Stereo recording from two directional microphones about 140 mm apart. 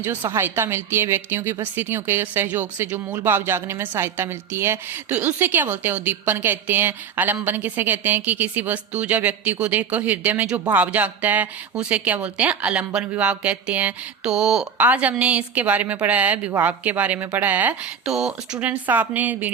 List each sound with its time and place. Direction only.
0.0 s speech: 15° right (ahead or behind)